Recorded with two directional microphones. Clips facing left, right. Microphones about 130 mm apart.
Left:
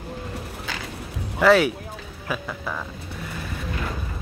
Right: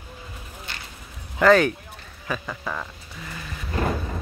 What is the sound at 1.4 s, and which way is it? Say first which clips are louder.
Speech: even; 5° left (ahead or behind).